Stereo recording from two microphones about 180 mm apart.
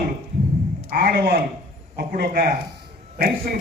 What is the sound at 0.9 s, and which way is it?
A man's voice, 55° right (ahead or behind).